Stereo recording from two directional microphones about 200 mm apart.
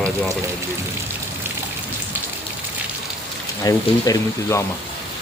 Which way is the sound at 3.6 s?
20° left (ahead or behind).